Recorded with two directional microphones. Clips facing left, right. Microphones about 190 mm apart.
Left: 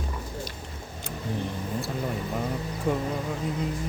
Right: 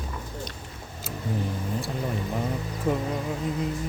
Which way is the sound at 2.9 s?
Centre (ahead or behind).